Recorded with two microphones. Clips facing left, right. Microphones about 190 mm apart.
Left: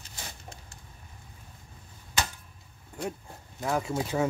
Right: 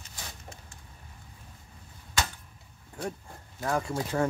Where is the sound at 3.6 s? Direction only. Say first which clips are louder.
Left 1 dB; 5° left (ahead or behind).